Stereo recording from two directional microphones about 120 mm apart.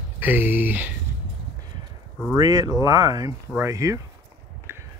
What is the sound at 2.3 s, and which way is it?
Speech, 30° right (ahead or behind).